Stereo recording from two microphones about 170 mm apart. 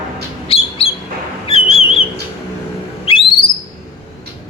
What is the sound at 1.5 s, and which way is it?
Whistle, 35° left (ahead or behind).